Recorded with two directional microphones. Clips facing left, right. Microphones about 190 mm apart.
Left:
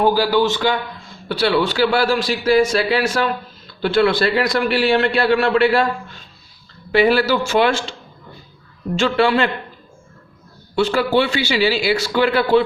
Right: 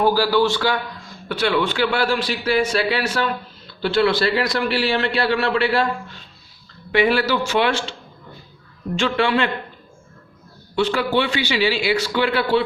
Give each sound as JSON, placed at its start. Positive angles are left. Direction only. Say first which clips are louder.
{"t": 0.0, "sound": "a man's voice", "louder": "left 1 dB", "side_deg": 15}
{"t": 1.3, "sound": "a man's voice", "louder": "left 3 dB", "side_deg": 35}
{"t": 6.9, "sound": "a man's voice", "louder": "left 3 dB", "side_deg": 35}
{"t": 9.0, "sound": "a man's voice", "louder": "left 3 dB", "side_deg": 40}
{"t": 10.8, "sound": "a man's voice", "louder": "left 3 dB", "side_deg": 40}